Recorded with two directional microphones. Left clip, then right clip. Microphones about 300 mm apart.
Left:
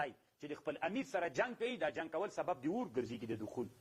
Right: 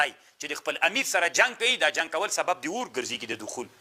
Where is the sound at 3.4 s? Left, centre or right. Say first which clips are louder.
Right 8 dB; right.